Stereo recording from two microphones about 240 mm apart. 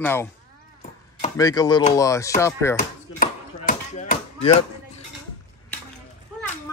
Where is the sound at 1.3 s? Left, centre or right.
Centre.